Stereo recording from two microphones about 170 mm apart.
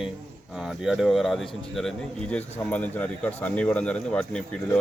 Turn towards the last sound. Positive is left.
turn(degrees=5)  # may be behind; listen again after turning